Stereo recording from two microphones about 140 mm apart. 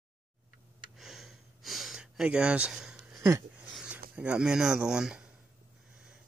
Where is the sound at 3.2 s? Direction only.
20° right (ahead or behind).